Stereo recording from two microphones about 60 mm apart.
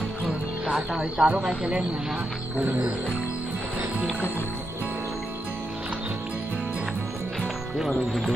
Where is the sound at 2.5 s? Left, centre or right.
Right.